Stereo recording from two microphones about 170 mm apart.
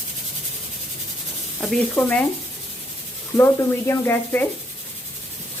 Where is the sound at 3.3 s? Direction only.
15° left (ahead or behind).